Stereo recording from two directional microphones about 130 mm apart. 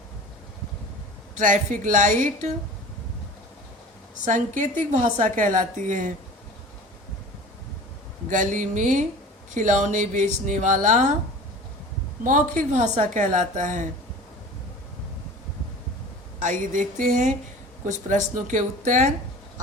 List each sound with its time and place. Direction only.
1.4 s speech: 80° right
4.3 s a woman's voice: 80° right
5.9 s a woman's voice: 80° right
8.3 s speech: 75° right (ahead or behind)
12.2 s a woman's voice: 80° right
16.4 s speech: 75° right (ahead or behind)